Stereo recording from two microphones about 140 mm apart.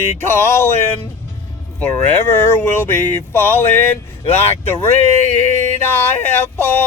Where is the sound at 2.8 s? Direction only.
15° left (ahead or behind).